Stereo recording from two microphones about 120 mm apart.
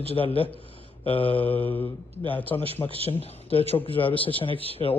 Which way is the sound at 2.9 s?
50° right (ahead or behind).